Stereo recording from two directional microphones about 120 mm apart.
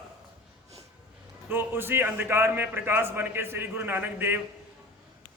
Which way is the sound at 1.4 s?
15° right (ahead or behind).